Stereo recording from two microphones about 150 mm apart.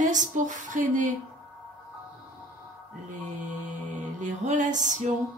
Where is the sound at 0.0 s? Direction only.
55° right (ahead or behind).